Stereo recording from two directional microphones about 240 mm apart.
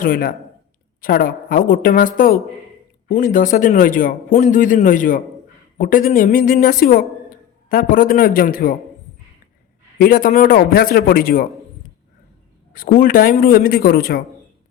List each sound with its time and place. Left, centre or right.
0.0 s a man's voice: left
10.0 s a man's voice: left
12.7 s a man's voice: left